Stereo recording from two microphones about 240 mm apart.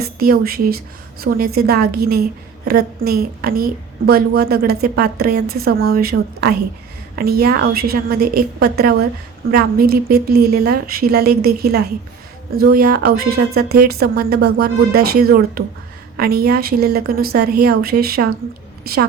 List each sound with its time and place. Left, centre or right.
0.0 s a woman's voice: right